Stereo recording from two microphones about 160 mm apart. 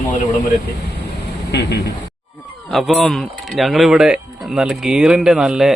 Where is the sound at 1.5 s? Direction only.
90° left.